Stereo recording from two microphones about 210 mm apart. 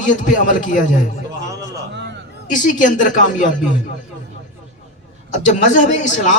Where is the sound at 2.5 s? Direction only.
40° left (ahead or behind).